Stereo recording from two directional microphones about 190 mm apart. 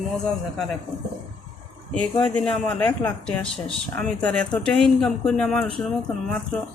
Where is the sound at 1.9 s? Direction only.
5° left (ahead or behind).